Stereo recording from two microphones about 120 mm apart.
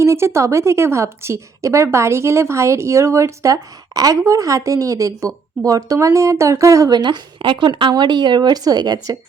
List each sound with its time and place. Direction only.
0.0 s speech: 25° right (ahead or behind)